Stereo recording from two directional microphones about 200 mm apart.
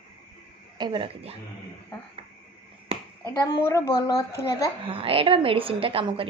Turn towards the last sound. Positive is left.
turn(degrees=-25)  # may be behind; listen again after turning